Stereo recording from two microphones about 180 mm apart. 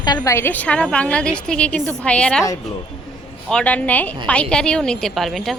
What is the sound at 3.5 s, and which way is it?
A woman's voice, 5° left (ahead or behind).